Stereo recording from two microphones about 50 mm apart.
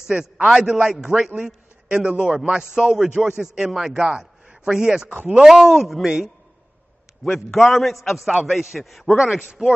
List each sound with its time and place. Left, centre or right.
0.4 s a man's voice: centre
0.7 s a man's voice: centre
3.8 s a man's voice: centre
7.2 s a man's voice: centre